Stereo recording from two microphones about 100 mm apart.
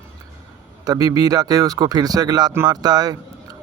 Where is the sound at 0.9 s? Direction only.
40° right (ahead or behind).